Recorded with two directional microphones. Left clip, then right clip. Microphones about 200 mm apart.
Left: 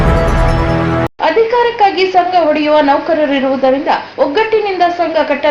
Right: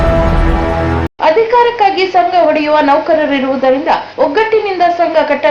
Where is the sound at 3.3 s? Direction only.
25° right (ahead or behind).